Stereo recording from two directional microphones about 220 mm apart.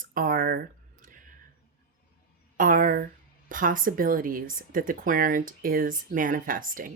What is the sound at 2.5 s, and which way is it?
Speech, 40° right (ahead or behind).